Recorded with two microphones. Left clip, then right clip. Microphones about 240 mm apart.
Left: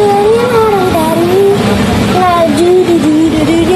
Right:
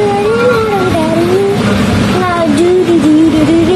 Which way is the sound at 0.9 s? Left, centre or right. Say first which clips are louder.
Left 1 dB; centre.